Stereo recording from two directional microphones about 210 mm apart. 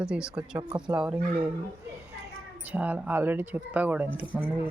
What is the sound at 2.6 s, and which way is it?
Speech, 10° right (ahead or behind).